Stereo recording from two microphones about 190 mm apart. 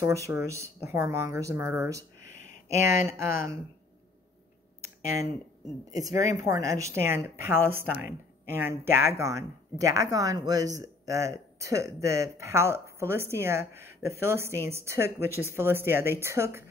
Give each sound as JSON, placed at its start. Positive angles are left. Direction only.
{"t": 0.0, "sound": "a woman's voice", "side_deg": -15}
{"t": 5.9, "sound": "a woman's voice", "side_deg": -20}